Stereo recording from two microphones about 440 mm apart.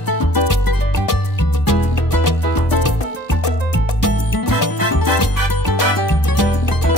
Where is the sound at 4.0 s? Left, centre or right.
Left.